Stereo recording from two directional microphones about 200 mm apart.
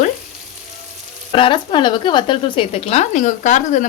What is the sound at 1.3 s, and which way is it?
Speech, 25° left (ahead or behind).